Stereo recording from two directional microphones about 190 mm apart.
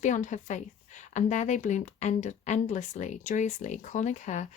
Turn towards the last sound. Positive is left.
turn(degrees=40)  # may be behind; listen again after turning